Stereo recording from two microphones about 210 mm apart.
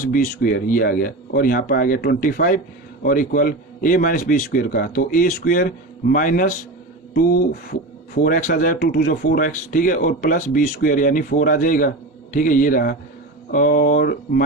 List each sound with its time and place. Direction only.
0.0 s a man's voice: 40° left (ahead or behind)
7.7 s a man's voice: 40° left (ahead or behind)